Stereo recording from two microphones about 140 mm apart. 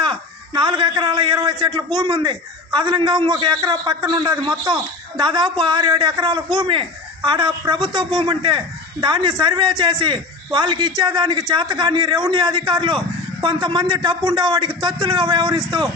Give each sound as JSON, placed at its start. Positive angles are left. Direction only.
{"t": 0.0, "sound": "a man's voice", "side_deg": -35}